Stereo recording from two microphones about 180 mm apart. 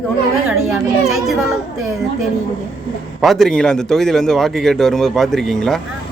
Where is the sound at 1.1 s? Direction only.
Centre (ahead or behind).